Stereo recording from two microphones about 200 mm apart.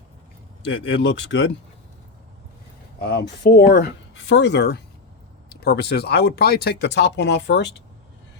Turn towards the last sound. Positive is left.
turn(degrees=60)  # may be behind; listen again after turning